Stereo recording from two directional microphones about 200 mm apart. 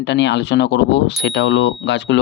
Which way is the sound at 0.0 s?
60° left (ahead or behind).